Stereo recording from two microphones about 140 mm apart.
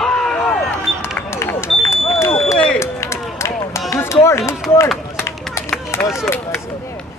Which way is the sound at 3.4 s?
20° left (ahead or behind).